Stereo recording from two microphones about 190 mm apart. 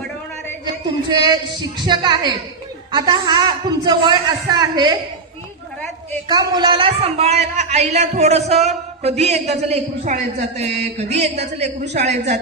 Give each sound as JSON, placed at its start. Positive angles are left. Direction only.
{"t": 1.0, "sound": "a man's voice", "side_deg": -20}
{"t": 6.2, "sound": "speech", "side_deg": -20}